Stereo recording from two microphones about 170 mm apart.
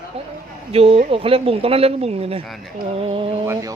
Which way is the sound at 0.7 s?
35° right (ahead or behind).